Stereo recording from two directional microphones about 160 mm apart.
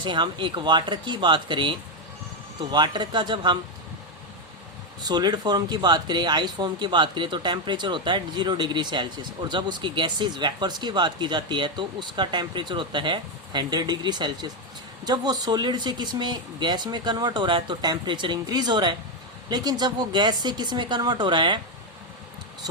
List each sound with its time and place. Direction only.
0.0 s speech: 30° right (ahead or behind)
2.7 s speech: 25° right (ahead or behind)
5.0 s speech: 25° right (ahead or behind)